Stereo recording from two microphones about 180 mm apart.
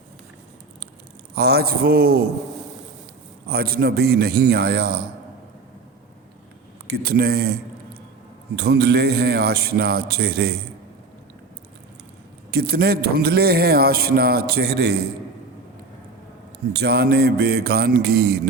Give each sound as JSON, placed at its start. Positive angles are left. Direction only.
{"t": 1.4, "sound": "speech", "side_deg": -60}
{"t": 3.4, "sound": "speech", "side_deg": -60}
{"t": 6.8, "sound": "speech", "side_deg": -60}
{"t": 12.5, "sound": "speech", "side_deg": -60}
{"t": 16.7, "sound": "speech", "side_deg": -65}